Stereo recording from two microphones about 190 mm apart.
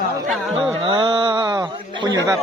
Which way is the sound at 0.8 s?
25° right (ahead or behind).